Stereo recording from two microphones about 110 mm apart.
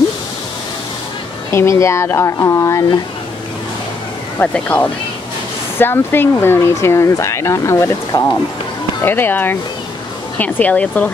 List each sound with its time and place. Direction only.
1.5 s speech: 25° left (ahead or behind)
4.4 s speech: 15° left (ahead or behind)